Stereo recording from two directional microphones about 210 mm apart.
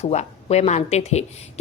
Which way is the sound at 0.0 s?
30° left (ahead or behind).